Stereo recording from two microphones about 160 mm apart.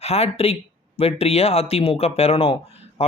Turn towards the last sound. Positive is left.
turn(degrees=35)  # may be behind; listen again after turning